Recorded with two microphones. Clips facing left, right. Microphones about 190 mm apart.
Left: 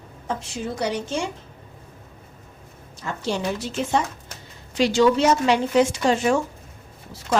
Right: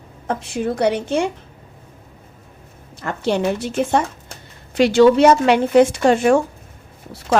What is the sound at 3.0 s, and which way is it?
A woman's voice, 60° right (ahead or behind).